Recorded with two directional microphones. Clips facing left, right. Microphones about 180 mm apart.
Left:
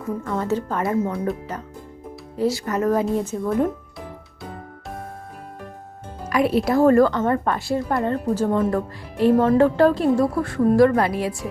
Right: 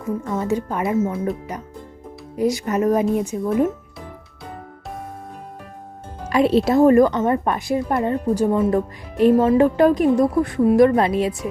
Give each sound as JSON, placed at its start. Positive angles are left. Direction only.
{"t": 0.3, "sound": "a woman's voice", "side_deg": -10}
{"t": 1.0, "sound": "speech", "side_deg": 0}
{"t": 2.3, "sound": "a woman's voice", "side_deg": -15}
{"t": 6.2, "sound": "a woman's voice", "side_deg": -25}
{"t": 8.7, "sound": "a woman's voice", "side_deg": -20}